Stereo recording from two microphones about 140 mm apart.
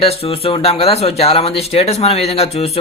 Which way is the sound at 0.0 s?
45° left (ahead or behind).